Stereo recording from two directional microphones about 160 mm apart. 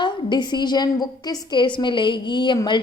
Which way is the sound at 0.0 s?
30° left (ahead or behind).